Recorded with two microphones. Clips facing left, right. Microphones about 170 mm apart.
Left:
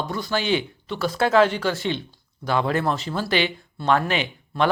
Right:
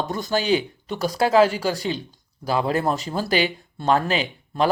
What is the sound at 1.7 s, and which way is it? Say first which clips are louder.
Speech: even; 35° right (ahead or behind).